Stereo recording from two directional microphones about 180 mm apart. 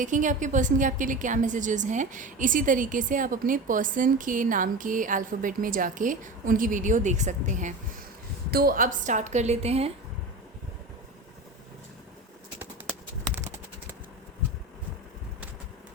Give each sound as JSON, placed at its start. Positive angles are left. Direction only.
{"t": 0.0, "sound": "a woman's voice", "side_deg": -45}
{"t": 8.4, "sound": "a woman's voice", "side_deg": -55}